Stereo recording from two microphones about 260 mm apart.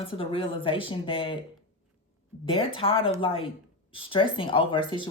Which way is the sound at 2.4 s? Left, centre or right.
Left.